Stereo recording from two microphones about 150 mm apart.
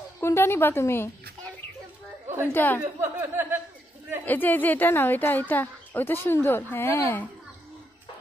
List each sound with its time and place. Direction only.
0.2 s speech: 15° left (ahead or behind)
2.5 s speech: 15° left (ahead or behind)
3.0 s chuckle: 15° right (ahead or behind)
4.2 s speech: 10° left (ahead or behind)